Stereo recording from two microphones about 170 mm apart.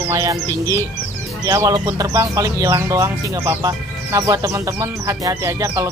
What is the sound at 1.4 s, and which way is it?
Speech, 20° right (ahead or behind).